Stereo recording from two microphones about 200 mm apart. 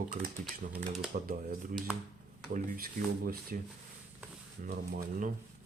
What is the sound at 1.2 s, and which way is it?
Speech, 45° right (ahead or behind).